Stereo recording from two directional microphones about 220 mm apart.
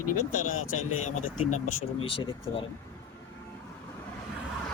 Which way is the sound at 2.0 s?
25° left (ahead or behind).